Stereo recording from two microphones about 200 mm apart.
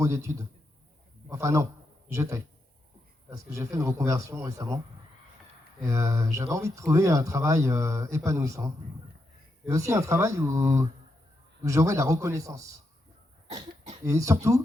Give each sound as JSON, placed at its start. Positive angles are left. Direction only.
{"t": 0.0, "sound": "speech", "side_deg": -15}
{"t": 5.8, "sound": "speech", "side_deg": -15}
{"t": 13.5, "sound": "a sound", "side_deg": -35}
{"t": 14.0, "sound": "speech", "side_deg": -15}